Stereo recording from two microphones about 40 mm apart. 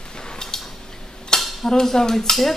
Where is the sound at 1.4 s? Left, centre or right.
Centre.